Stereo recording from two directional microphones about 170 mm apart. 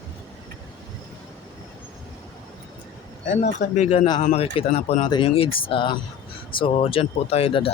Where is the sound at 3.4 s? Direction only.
45° left (ahead or behind).